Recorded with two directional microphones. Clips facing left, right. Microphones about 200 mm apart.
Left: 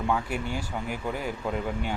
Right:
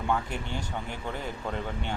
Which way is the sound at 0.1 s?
10° left (ahead or behind).